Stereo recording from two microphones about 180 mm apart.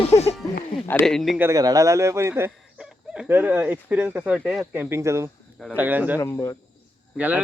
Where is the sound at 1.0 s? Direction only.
Centre (ahead or behind).